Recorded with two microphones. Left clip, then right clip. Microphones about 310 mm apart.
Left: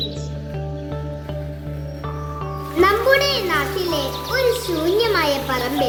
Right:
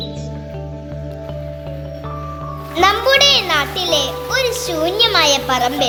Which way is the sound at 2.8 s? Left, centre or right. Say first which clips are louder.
Right 4 dB; right.